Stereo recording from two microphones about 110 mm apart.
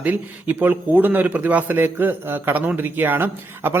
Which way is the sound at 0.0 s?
15° right (ahead or behind).